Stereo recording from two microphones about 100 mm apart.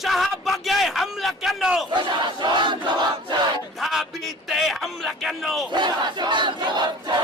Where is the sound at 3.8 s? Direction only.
Centre (ahead or behind).